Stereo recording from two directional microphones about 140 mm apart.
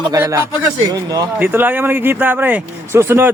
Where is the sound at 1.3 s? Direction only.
15° right (ahead or behind).